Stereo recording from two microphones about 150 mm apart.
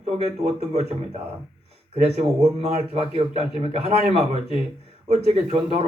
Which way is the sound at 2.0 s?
45° right (ahead or behind).